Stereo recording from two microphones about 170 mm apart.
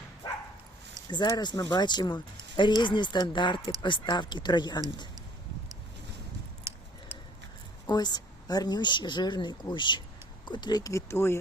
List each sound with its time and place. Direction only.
1.1 s speech: 25° left (ahead or behind)
6.7 s a sound: 15° right (ahead or behind)
7.9 s speech: 25° left (ahead or behind)